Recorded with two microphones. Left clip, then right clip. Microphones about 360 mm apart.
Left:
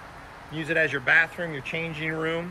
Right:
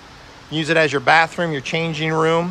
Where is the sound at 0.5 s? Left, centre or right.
Centre.